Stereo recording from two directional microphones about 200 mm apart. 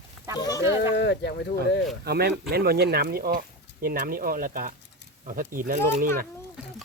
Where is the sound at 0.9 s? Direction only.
60° left (ahead or behind).